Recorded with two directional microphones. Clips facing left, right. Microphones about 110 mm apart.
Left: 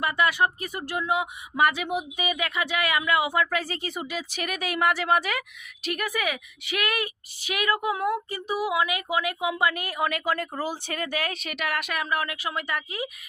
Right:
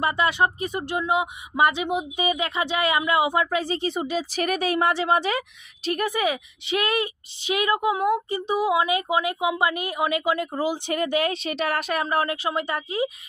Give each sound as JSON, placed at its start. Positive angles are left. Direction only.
{"t": 0.0, "sound": "speech", "side_deg": -25}